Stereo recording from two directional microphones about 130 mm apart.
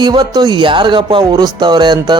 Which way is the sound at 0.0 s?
35° right (ahead or behind).